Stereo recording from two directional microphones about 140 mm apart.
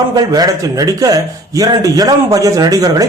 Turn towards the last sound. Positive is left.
turn(degrees=-25)  # may be behind; listen again after turning